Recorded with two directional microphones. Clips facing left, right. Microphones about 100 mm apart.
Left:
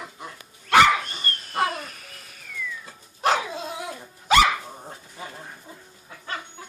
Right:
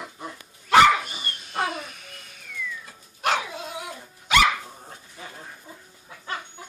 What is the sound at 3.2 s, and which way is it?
Dog, 30° left (ahead or behind).